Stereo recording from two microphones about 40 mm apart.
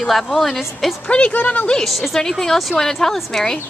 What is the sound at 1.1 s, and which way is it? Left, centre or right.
Speech, left.